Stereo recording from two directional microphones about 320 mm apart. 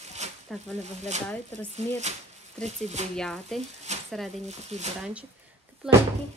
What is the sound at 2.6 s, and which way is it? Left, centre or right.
Speech, right.